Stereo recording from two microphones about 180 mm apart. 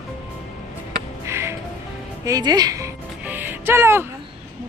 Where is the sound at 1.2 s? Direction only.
15° right (ahead or behind).